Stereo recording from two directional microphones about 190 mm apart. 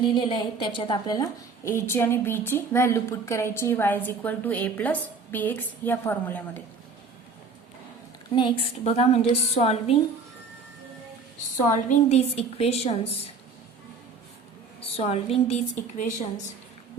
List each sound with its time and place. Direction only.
0.0 s a woman's voice: 25° left (ahead or behind)
8.4 s a woman's voice: 25° left (ahead or behind)
11.7 s a woman's voice: 40° left (ahead or behind)
14.9 s a woman's voice: 30° left (ahead or behind)